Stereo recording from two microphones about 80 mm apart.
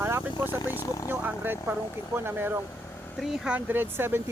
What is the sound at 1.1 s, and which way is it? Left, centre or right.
Speech, right.